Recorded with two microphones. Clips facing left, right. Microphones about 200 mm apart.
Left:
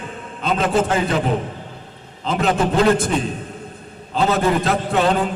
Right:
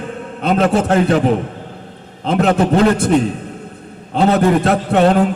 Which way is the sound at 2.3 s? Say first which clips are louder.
Right 5 dB; 65° right (ahead or behind).